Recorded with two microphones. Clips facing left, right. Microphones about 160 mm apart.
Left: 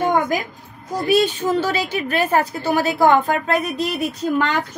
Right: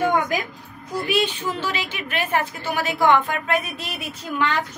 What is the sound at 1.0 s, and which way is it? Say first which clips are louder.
A woman's voice: left 7 dB; 40° left (ahead or behind).